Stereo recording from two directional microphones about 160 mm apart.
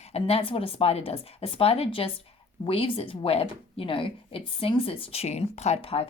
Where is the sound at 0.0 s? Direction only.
40° left (ahead or behind).